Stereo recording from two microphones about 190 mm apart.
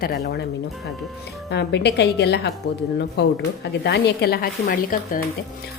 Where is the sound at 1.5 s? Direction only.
60° left (ahead or behind).